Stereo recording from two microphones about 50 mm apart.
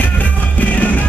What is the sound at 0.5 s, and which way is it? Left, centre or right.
Music, left.